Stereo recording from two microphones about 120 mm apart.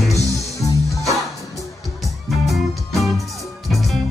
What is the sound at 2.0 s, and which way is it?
Music, centre (ahead or behind).